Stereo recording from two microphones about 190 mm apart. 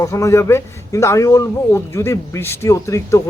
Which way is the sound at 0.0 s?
15° left (ahead or behind).